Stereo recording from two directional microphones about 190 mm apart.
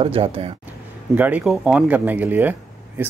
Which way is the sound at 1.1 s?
10° right (ahead or behind).